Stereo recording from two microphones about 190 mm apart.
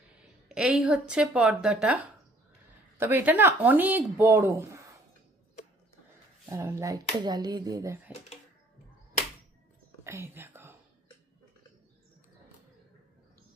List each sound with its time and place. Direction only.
0.2 s speech: 5° right (ahead or behind)
3.0 s speech: 10° right (ahead or behind)
6.5 s speech: 15° right (ahead or behind)
10.0 s whispering: 15° right (ahead or behind)